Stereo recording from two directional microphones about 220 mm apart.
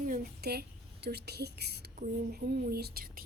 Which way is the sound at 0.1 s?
45° right (ahead or behind).